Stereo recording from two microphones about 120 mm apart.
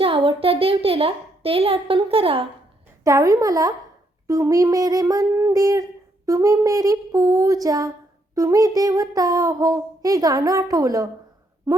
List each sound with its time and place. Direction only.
0.0 s a child's voice: 50° right (ahead or behind)
3.0 s speech: 30° right (ahead or behind)